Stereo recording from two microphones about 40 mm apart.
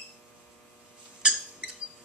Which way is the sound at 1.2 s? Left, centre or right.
Right.